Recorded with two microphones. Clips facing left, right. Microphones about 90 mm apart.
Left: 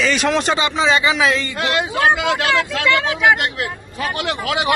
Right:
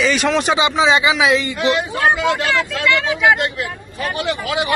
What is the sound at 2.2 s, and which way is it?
Speech, 75° left (ahead or behind).